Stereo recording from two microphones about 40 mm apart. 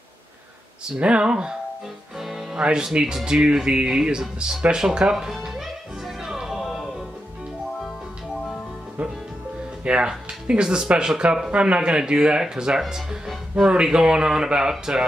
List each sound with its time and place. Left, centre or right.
0.9 s speech: right
2.1 s music: centre
2.6 s speech: right
6.0 s music: centre
9.8 s speech: right
13.8 s speech: centre